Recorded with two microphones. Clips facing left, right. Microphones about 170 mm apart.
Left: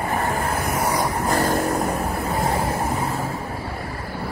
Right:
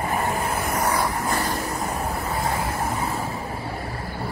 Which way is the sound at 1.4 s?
50° left (ahead or behind).